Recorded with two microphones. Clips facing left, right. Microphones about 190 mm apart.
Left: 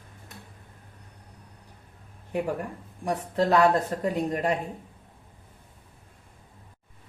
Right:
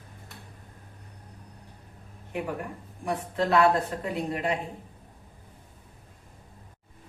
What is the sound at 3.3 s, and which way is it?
Speech, 40° left (ahead or behind).